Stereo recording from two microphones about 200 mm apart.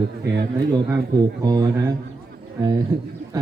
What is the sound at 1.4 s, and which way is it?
A man's voice, 20° right (ahead or behind).